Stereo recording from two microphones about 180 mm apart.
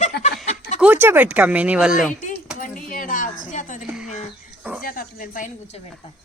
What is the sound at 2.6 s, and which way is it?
Speech, 50° left (ahead or behind).